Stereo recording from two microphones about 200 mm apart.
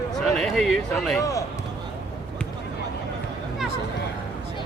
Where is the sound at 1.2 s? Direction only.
15° left (ahead or behind).